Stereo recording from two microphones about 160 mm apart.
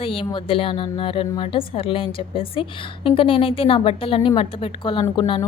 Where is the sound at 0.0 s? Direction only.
35° left (ahead or behind).